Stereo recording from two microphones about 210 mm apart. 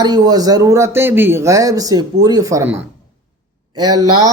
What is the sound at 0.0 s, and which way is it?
Speech, 20° right (ahead or behind).